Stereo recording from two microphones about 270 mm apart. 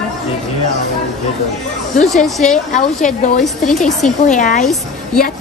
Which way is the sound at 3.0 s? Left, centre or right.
Left.